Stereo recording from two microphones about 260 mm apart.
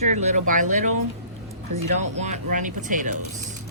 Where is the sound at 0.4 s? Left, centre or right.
Right.